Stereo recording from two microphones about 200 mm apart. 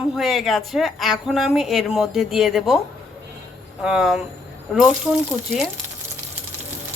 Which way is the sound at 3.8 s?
5° right (ahead or behind).